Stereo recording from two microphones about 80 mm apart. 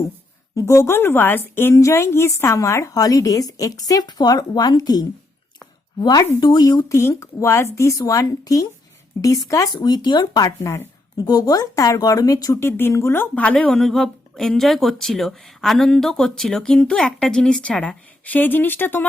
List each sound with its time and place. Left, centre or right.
0.5 s a woman's voice: left
1.7 s a woman's voice: left
9.7 s a woman's voice: left
12.5 s speech: left
13.3 s speech: centre
13.7 s speech: centre; by 19.0 s left